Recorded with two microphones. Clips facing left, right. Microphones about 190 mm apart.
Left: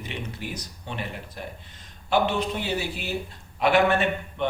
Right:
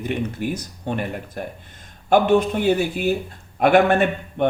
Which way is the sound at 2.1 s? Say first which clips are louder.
Right 8 dB; 50° right (ahead or behind).